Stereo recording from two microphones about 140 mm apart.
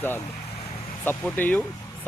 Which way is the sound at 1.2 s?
10° left (ahead or behind).